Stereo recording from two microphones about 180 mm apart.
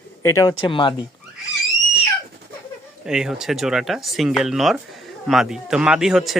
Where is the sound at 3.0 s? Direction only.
5° right (ahead or behind).